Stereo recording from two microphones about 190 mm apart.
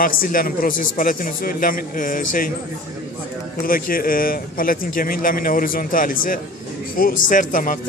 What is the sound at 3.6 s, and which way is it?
A man's voice, 50° left (ahead or behind).